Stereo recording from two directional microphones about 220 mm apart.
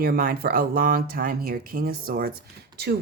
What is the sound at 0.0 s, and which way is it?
Speech, 40° right (ahead or behind).